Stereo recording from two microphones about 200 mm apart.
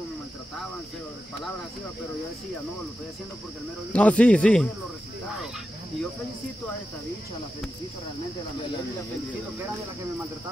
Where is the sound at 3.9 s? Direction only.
5° left (ahead or behind).